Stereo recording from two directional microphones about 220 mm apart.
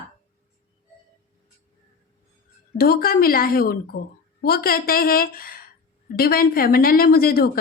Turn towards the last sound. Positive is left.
turn(degrees=45)  # may be behind; listen again after turning